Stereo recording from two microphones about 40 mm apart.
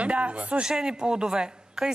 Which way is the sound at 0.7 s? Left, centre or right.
Centre.